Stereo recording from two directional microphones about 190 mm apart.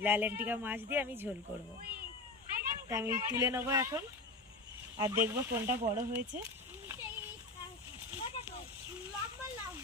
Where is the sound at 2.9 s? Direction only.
15° right (ahead or behind).